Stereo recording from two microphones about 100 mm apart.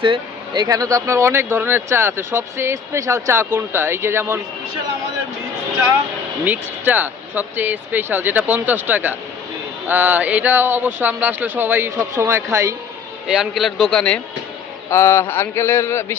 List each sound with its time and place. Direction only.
0.0 s speech: 55° right (ahead or behind)
0.7 s speech: 35° right (ahead or behind)
6.4 s speech: 20° right (ahead or behind)
13.2 s a man's voice: 5° right (ahead or behind)
14.8 s speech: 25° left (ahead or behind)